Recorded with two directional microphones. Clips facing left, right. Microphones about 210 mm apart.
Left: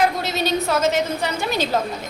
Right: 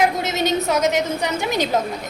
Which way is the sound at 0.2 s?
20° right (ahead or behind).